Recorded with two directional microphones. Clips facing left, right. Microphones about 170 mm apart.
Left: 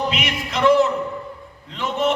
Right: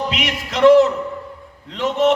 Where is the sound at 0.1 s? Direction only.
90° right.